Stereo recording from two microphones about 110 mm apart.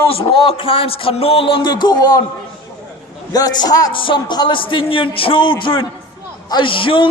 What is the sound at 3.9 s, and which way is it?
A man's voice, 50° left (ahead or behind).